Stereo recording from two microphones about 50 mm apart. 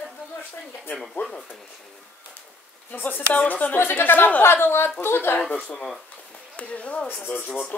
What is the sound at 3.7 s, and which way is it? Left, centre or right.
Speech, left.